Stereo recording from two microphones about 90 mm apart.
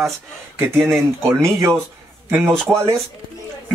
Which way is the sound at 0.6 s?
30° right (ahead or behind).